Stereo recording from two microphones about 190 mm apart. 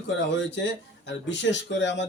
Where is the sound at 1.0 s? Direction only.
70° left (ahead or behind).